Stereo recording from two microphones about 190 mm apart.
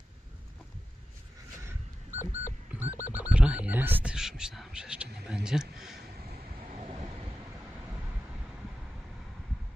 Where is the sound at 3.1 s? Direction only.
5° right (ahead or behind).